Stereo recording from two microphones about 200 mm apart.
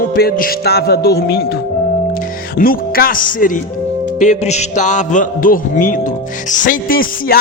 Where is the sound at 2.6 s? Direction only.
45° left (ahead or behind).